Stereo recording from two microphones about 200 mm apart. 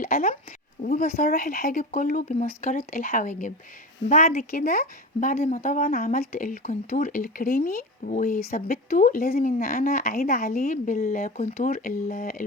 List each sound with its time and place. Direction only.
0.0 s speech: 45° left (ahead or behind)